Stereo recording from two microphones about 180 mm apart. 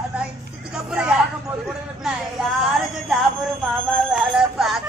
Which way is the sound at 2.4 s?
5° right (ahead or behind).